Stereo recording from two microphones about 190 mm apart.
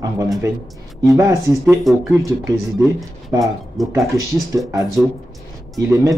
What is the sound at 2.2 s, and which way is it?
Speech, 15° right (ahead or behind).